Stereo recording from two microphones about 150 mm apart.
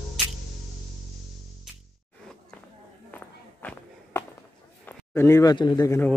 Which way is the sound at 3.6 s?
10° left (ahead or behind).